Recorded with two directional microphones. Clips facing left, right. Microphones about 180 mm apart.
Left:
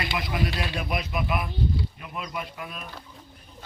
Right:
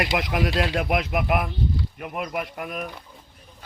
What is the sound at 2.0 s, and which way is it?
Speech, 55° right (ahead or behind).